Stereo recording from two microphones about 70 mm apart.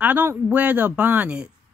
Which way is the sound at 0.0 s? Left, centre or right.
Right.